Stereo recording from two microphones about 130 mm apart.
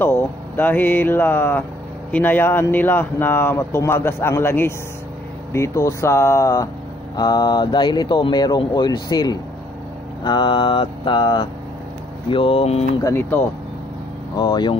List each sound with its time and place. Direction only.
0.0 s a man's voice: 15° left (ahead or behind); by 12.8 s 50° left (ahead or behind)
13.0 s speech: 20° left (ahead or behind)
14.4 s speech: 35° left (ahead or behind)